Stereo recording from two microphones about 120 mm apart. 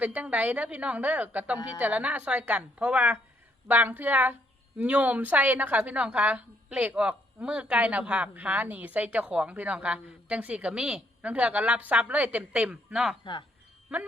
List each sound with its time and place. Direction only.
0.0 s a woman's voice: 10° right (ahead or behind)